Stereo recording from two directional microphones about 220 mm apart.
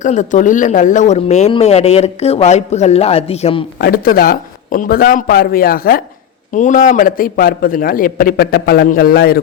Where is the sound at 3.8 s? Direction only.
45° left (ahead or behind).